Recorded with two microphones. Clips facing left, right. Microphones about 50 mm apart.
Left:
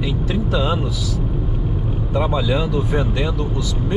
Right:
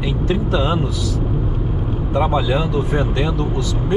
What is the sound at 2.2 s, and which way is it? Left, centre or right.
Speech, centre.